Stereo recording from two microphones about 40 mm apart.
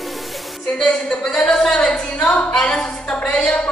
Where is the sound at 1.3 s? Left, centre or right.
Centre.